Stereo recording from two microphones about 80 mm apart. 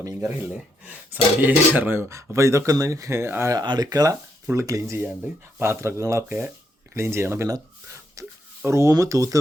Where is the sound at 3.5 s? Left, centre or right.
Right.